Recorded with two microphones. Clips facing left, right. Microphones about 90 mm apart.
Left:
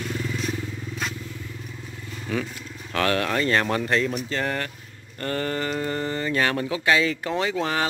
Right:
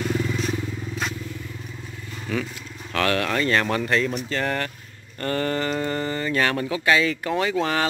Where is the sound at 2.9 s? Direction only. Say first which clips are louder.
Even; 25° left (ahead or behind).